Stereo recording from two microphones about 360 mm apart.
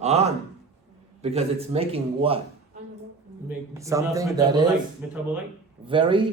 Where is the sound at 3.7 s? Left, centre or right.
Centre.